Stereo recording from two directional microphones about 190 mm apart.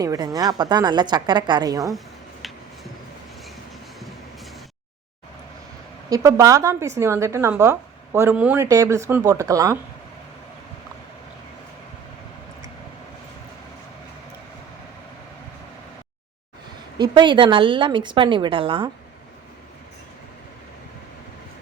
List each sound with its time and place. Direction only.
0.0 s a woman's voice: 20° right (ahead or behind)
6.1 s a woman's voice: 15° right (ahead or behind)
17.0 s a woman's voice: 25° right (ahead or behind)